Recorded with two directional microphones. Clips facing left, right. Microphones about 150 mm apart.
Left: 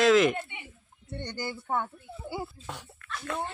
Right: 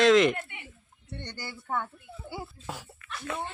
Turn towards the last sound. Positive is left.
turn(degrees=0)  # may be behind; listen again after turning